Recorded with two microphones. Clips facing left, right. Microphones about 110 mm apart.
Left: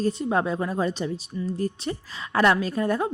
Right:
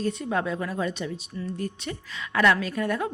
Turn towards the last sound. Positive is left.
turn(degrees=30)  # may be behind; listen again after turning